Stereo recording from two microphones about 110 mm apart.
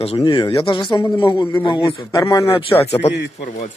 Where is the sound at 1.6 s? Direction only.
45° left (ahead or behind).